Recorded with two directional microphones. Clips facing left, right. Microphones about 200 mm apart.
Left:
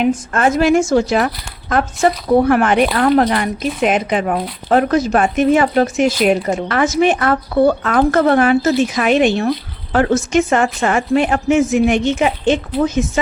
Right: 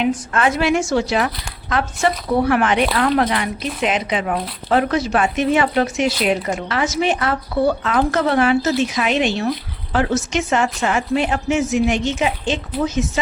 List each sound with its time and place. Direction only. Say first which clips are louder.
0.3 s a woman's voice: left 5 dB; 45° left (ahead or behind)